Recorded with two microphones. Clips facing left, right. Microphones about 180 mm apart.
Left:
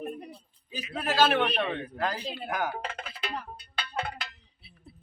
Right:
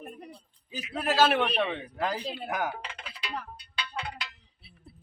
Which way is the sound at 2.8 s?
50° left (ahead or behind).